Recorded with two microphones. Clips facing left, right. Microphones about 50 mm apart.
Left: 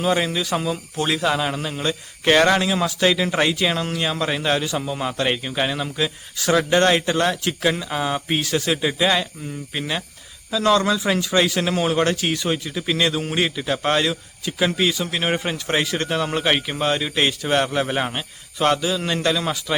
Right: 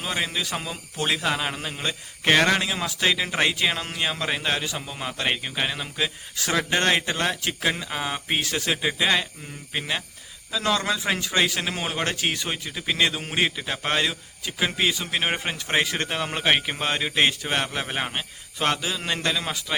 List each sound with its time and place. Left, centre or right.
0.0 s a man's voice: centre
12.1 s speech: centre
12.5 s a man's voice: centre